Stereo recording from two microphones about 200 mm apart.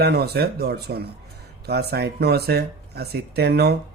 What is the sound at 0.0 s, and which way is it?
Speech, 55° right (ahead or behind).